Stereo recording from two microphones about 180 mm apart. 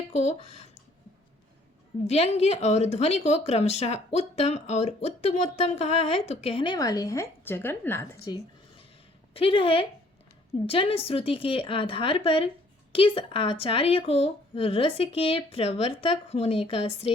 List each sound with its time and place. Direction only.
0.1 s speech: 40° left (ahead or behind)
2.0 s speech: 35° left (ahead or behind); by 8.4 s 20° left (ahead or behind)
9.3 s speech: 30° left (ahead or behind)